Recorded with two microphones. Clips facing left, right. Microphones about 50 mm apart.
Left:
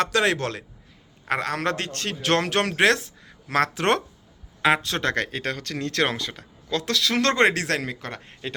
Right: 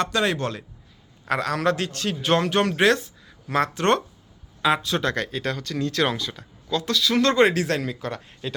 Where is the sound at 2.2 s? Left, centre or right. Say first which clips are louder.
Right 1 dB; left.